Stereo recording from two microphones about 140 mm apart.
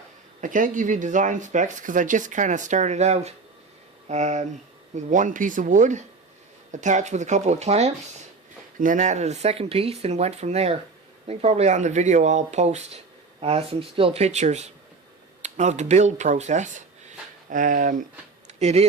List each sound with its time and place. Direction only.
0.4 s speech: 70° right (ahead or behind); by 7.9 s 50° right (ahead or behind)
8.8 s speech: 65° right (ahead or behind)
17.5 s speech: 70° right (ahead or behind)
18.4 s a sound: 50° right (ahead or behind)